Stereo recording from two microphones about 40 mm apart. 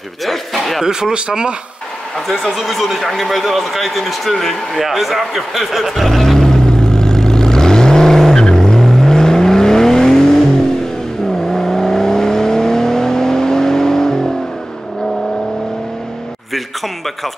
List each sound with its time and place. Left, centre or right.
0.2 s speech: centre
0.8 s speech: centre
2.1 s speech: centre
3.3 s a sound: centre
11.4 s vehicle: centre
16.5 s a sound: centre